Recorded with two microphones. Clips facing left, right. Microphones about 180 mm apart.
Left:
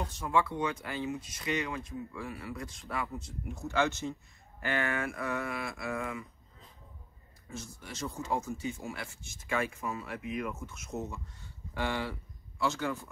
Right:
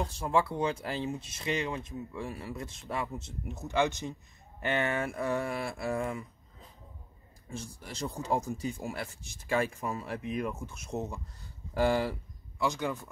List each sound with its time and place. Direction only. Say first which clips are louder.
0.2 s speech: right 1 dB; 30° right (ahead or behind)
7.4 s speech: right 2 dB; 35° right (ahead or behind)
12.5 s speech: right 1 dB; 15° right (ahead or behind)